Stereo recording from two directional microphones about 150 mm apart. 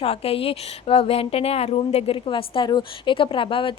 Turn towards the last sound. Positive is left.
turn(degrees=35)  # may be behind; listen again after turning